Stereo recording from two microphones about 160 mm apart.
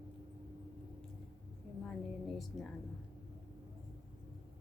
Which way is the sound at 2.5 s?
Centre (ahead or behind).